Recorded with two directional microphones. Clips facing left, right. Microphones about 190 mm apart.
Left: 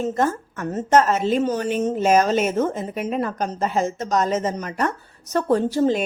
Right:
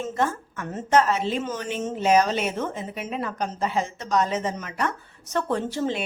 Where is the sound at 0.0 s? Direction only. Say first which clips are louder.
Left 4 dB; 40° left (ahead or behind).